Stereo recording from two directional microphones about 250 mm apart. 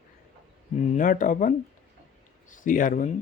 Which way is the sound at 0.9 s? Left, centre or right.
Left.